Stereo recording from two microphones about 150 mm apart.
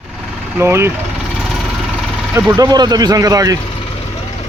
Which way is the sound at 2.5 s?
25° right (ahead or behind).